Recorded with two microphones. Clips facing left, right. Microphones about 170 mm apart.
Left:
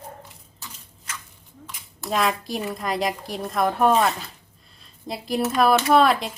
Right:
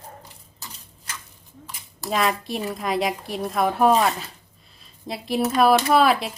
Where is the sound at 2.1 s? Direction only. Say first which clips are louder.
Even; centre (ahead or behind).